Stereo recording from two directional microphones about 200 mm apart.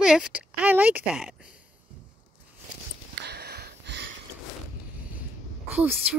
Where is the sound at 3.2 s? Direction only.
55° right (ahead or behind).